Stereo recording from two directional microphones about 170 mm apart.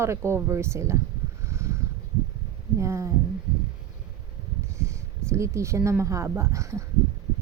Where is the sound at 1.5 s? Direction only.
15° right (ahead or behind).